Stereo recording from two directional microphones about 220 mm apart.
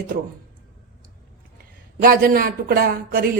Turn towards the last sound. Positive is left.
turn(degrees=-45)  # may be behind; listen again after turning